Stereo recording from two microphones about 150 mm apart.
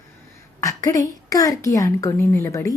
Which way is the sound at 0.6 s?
20° left (ahead or behind).